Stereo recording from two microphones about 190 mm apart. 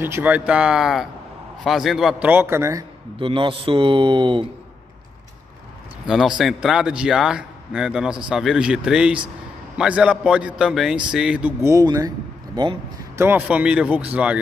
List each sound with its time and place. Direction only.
0.0 s a man's voice: 10° right (ahead or behind)
3.2 s a man's voice: 25° right (ahead or behind)
6.0 s a man's voice: centre (ahead or behind)